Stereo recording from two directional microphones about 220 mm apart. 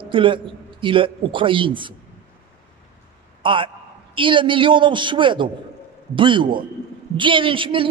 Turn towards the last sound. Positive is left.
turn(degrees=-25)  # may be behind; listen again after turning